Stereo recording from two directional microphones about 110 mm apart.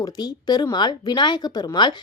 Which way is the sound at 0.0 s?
40° left (ahead or behind).